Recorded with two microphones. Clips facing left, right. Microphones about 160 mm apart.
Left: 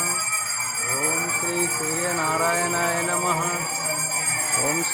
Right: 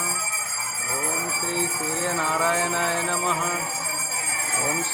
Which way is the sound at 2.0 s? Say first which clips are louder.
Even; 10° left (ahead or behind).